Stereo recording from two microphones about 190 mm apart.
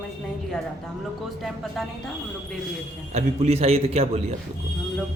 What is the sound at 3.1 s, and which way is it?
A man's voice, 35° right (ahead or behind).